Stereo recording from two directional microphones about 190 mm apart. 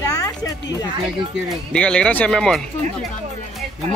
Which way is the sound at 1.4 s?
5° left (ahead or behind).